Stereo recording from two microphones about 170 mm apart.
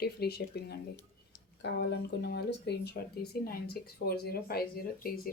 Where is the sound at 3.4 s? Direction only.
65° left (ahead or behind).